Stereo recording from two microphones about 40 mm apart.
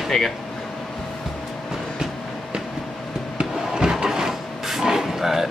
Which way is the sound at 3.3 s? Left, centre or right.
Centre.